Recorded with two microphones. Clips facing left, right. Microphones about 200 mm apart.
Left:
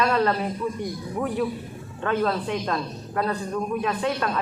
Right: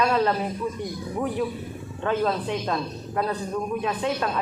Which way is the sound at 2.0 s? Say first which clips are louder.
Even; 20° right (ahead or behind).